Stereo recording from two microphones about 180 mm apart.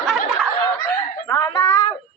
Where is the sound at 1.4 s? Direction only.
20° left (ahead or behind).